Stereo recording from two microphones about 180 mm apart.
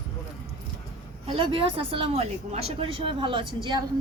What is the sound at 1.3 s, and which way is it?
A woman's voice, 30° right (ahead or behind).